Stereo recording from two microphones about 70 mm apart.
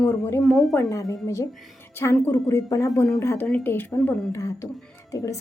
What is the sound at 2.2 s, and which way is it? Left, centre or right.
Speech, left.